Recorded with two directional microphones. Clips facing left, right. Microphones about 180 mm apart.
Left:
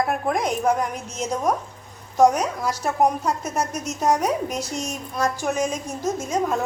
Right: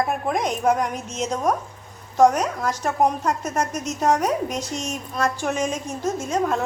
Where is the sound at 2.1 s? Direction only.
10° left (ahead or behind).